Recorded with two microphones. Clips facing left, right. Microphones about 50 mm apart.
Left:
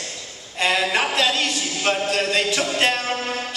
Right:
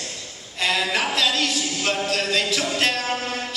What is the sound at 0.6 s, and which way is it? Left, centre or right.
Speech, centre.